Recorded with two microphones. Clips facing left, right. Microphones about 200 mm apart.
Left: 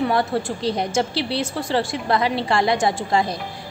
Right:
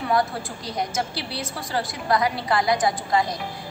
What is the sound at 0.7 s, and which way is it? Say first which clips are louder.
A woman's voice: left 4 dB; 30° left (ahead or behind).